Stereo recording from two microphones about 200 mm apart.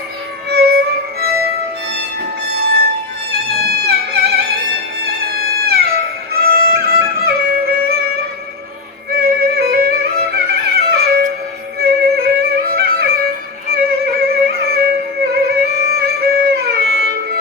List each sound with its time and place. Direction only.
0.5 s music: 50° right (ahead or behind)
3.6 s music: 50° right (ahead or behind)
9.0 s music: 50° right (ahead or behind)